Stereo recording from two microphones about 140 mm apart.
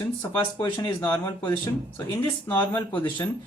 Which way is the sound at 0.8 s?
20° left (ahead or behind).